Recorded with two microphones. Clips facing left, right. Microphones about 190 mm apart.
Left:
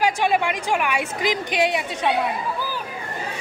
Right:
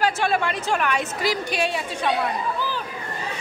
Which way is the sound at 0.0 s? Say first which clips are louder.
Left 2 dB; 15° left (ahead or behind).